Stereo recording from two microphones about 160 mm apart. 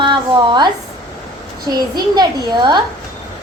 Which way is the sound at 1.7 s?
25° right (ahead or behind).